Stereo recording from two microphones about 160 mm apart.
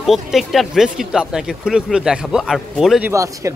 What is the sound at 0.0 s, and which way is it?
Speech, centre (ahead or behind).